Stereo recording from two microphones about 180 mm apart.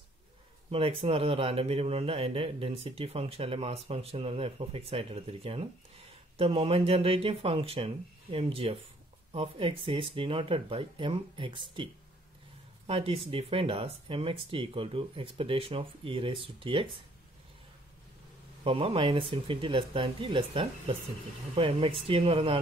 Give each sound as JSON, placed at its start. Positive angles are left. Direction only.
{"t": 0.7, "sound": "speech", "side_deg": -30}
{"t": 18.6, "sound": "speech", "side_deg": -30}